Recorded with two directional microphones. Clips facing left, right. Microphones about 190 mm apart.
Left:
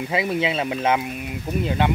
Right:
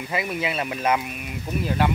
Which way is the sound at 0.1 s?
25° left (ahead or behind).